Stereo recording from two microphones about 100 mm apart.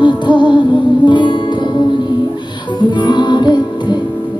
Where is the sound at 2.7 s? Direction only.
50° left (ahead or behind).